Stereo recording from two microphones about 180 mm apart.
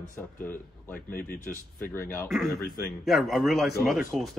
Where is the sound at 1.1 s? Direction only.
50° left (ahead or behind).